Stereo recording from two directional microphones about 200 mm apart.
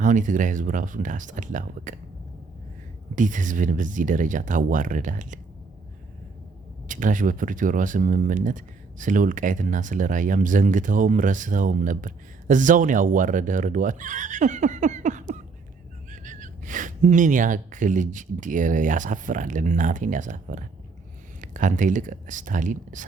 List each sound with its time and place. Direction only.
0.0 s speech: 40° right (ahead or behind)
3.2 s speech: 40° right (ahead or behind)
6.8 s speech: 40° right (ahead or behind)